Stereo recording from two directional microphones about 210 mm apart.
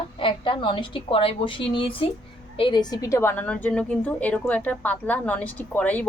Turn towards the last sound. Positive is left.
turn(degrees=5)  # may be behind; listen again after turning